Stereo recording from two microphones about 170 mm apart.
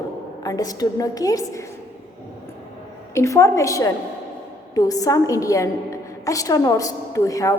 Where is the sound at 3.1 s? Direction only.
15° left (ahead or behind).